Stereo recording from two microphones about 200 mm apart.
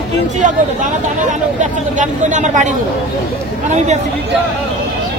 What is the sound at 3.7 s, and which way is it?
Speech, 35° right (ahead or behind).